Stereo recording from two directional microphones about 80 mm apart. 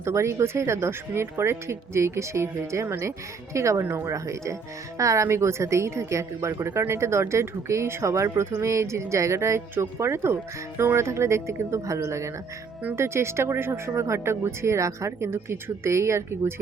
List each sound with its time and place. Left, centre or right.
0.0 s speech: right